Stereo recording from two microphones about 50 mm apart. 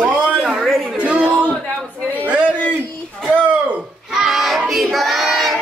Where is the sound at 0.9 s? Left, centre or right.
Right.